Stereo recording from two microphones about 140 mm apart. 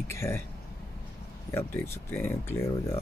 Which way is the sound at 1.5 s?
15° left (ahead or behind).